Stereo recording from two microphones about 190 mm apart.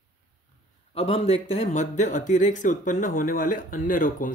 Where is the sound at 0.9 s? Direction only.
30° left (ahead or behind).